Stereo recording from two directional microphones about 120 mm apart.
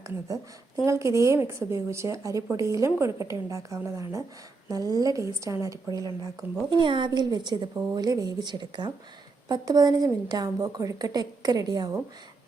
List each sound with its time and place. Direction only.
0.9 s a woman's voice: 25° right (ahead or behind)
6.7 s a woman's voice: 40° right (ahead or behind)